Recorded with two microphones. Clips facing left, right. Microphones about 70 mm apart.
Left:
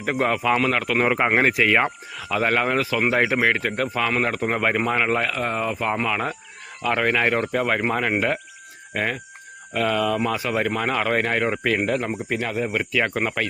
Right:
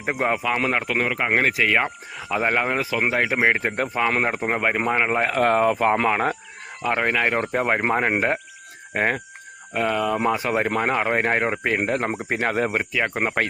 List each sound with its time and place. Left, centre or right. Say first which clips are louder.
0.0 s speech: left 1 dB; centre
1.0 s speech: left 4 dB; centre
1.4 s speech: right 1 dB; centre
2.1 s speech: even; centre
5.2 s speech: right 6 dB; right
6.9 s speech: left 1 dB; centre
7.5 s speech: right 1 dB; right
9.7 s speech: even; centre
10.2 s speech: right 2 dB; right
11.8 s speech: even; right
12.7 s speech: left 1 dB; right